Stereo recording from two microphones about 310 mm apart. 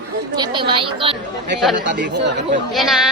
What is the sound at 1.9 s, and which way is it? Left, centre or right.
Speech, right.